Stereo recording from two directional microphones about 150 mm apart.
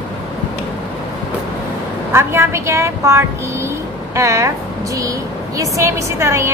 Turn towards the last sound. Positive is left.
turn(degrees=-20)  # may be behind; listen again after turning